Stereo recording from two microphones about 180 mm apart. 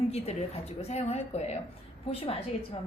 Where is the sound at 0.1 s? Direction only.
35° left (ahead or behind).